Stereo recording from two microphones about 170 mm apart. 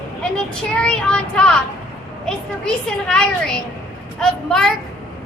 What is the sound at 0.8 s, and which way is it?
Speech, 5° left (ahead or behind).